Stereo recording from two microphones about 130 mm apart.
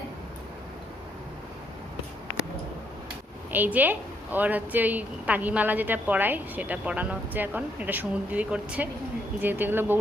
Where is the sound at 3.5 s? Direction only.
15° right (ahead or behind).